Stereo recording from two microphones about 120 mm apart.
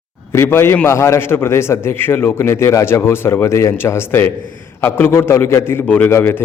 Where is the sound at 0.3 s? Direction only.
20° left (ahead or behind).